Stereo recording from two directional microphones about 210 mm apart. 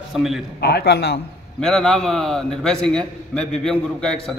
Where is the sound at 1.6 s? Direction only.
5° left (ahead or behind).